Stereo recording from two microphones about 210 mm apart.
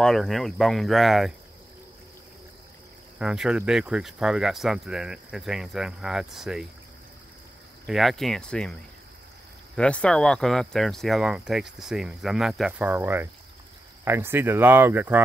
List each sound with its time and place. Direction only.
0.0 s speech: centre (ahead or behind)
3.2 s speech: 5° right (ahead or behind)
7.8 s speech: centre (ahead or behind)
9.8 s speech: 5° left (ahead or behind)